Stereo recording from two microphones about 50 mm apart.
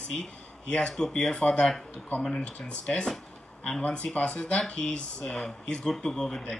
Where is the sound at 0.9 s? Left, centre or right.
Centre.